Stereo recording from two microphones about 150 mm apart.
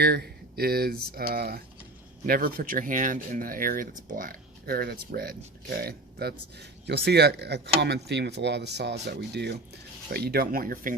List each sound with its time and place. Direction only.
0.0 s speech: 90° right
2.2 s speech: 75° right (ahead or behind); by 8.9 s 90° right
10.1 s speech: 90° right; by 10.9 s 70° right (ahead or behind)